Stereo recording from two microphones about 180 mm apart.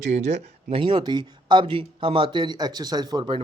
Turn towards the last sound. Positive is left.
turn(degrees=-25)  # may be behind; listen again after turning